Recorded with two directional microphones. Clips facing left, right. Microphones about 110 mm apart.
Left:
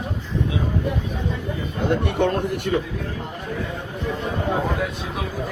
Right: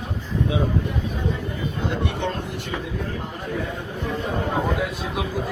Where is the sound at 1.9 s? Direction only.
55° left (ahead or behind).